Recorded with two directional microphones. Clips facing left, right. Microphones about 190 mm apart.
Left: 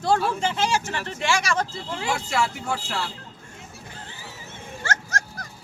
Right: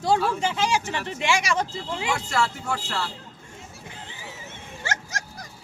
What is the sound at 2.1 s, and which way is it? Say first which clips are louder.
Speech: left 1 dB; 10° left (ahead or behind).